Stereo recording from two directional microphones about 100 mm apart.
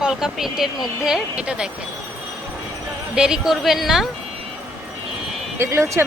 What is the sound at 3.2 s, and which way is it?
Speech, 5° right (ahead or behind).